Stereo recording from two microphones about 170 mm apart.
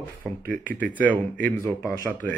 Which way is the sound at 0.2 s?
5° left (ahead or behind).